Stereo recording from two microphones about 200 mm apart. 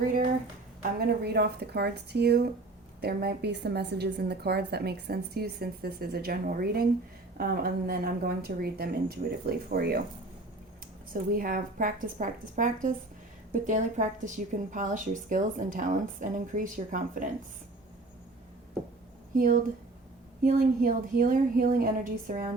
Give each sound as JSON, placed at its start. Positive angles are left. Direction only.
{"t": 0.8, "sound": "a woman's voice", "side_deg": -50}
{"t": 11.1, "sound": "a woman's voice", "side_deg": -45}
{"t": 19.3, "sound": "a woman's voice", "side_deg": -40}